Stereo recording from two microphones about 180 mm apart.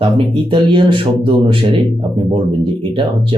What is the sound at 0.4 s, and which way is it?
Speech, 25° right (ahead or behind).